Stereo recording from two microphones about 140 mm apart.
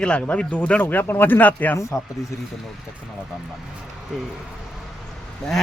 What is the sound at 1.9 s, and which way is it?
Speech, centre (ahead or behind).